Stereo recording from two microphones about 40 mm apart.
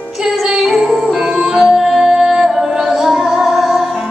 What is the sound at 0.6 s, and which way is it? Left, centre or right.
Music, centre.